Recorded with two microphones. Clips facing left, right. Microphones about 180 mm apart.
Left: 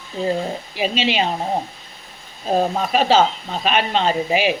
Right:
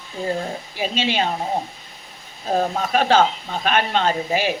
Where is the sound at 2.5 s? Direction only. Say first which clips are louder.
Left 2 dB; 10° left (ahead or behind).